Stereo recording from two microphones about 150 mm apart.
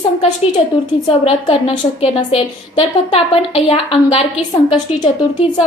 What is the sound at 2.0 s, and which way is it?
A woman's voice, 40° left (ahead or behind).